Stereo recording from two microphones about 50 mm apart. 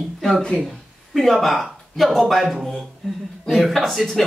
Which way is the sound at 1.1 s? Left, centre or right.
Centre.